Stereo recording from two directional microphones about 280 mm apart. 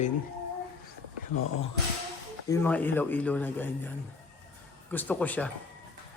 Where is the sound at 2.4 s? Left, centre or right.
Centre.